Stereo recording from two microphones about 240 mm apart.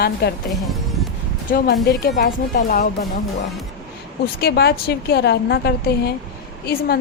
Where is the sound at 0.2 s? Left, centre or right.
Left.